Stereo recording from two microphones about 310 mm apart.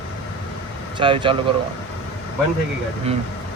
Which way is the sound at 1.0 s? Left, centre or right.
Centre.